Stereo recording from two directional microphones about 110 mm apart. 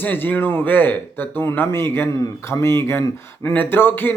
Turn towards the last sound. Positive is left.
turn(degrees=20)  # may be behind; listen again after turning